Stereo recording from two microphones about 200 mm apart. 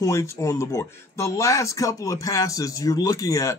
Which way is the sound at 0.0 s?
15° left (ahead or behind).